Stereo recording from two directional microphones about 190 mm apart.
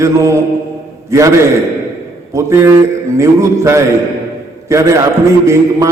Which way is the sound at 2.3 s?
15° right (ahead or behind).